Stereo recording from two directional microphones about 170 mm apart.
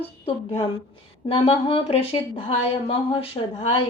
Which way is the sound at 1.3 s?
30° left (ahead or behind).